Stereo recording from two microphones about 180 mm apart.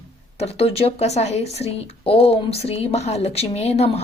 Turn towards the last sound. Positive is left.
turn(degrees=35)  # may be behind; listen again after turning